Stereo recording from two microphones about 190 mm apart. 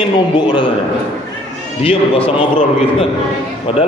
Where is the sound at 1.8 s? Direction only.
30° left (ahead or behind).